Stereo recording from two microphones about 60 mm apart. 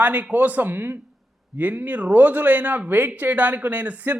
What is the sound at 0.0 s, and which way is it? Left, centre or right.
Speech, right.